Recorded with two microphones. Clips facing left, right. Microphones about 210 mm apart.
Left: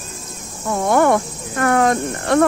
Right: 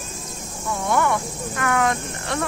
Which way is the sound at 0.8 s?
45° left (ahead or behind).